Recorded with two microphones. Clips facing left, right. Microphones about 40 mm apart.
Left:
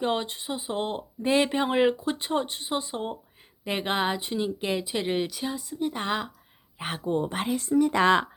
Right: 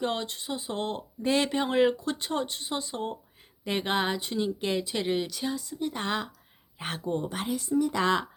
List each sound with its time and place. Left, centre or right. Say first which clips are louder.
0.0 s speech: left 3 dB; centre
7.3 s a woman's voice: left 3 dB; left